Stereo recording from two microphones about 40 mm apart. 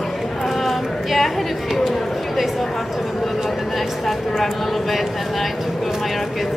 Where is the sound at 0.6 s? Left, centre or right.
Centre.